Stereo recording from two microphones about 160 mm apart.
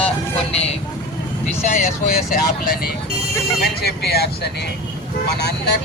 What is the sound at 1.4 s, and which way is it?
Speech, 45° left (ahead or behind).